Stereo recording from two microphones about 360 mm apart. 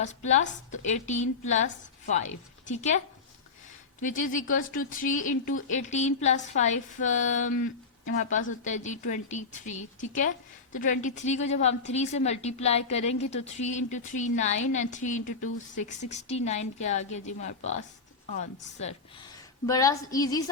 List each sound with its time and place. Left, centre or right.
0.0 s a woman's voice: centre
4.0 s a woman's voice: left